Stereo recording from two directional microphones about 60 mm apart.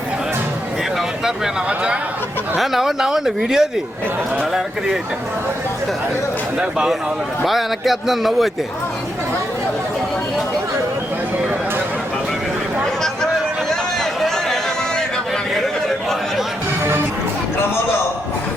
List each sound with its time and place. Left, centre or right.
2.6 s speech: centre
6.6 s speech: centre
7.4 s speech: centre
13.7 s a sound: centre
15.5 s chatter: centre